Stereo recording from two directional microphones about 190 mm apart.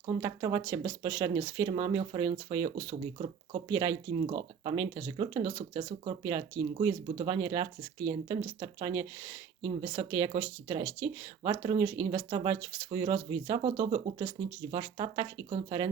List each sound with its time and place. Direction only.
0.0 s speech: 15° right (ahead or behind); by 3.6 s 35° right (ahead or behind)
3.7 s speech: 25° right (ahead or behind)